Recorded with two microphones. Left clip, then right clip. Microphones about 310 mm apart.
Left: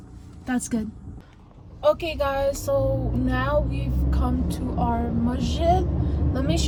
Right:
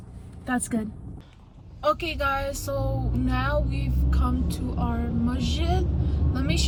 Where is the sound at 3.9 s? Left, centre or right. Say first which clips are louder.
Left 2 dB; centre.